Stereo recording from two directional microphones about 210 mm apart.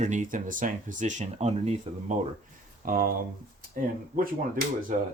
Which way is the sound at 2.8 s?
40° right (ahead or behind).